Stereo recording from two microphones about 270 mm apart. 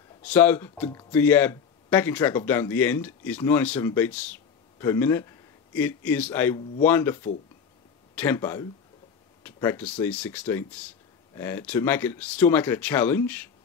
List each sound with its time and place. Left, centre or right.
0.2 s speech: centre